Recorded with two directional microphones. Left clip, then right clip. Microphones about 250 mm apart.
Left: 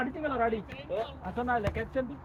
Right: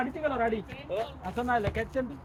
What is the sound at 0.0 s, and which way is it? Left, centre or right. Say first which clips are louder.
Speech: right 1 dB; right.